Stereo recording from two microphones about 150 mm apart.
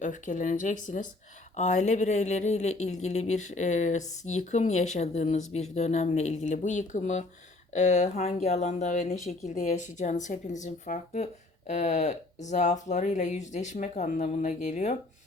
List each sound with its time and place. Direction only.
0.0 s speech: 55° left (ahead or behind)